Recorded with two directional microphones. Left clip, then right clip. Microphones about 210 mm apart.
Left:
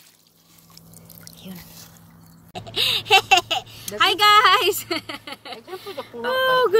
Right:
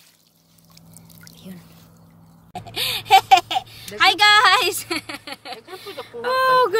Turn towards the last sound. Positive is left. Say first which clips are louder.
# right 2 dB
turn(degrees=-20)  # may be behind; listen again after turning